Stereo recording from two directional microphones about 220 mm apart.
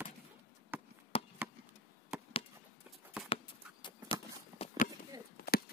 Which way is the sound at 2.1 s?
5° right (ahead or behind).